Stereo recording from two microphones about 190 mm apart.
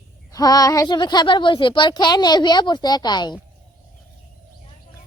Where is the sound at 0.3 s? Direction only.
20° left (ahead or behind).